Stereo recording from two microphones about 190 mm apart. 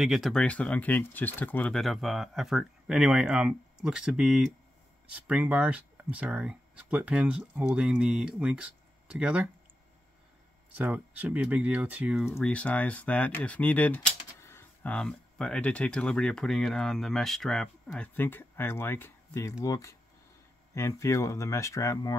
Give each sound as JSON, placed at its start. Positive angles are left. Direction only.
{"t": 0.0, "sound": "speech", "side_deg": 0}
{"t": 10.8, "sound": "speech", "side_deg": -5}
{"t": 12.4, "sound": "speech", "side_deg": 5}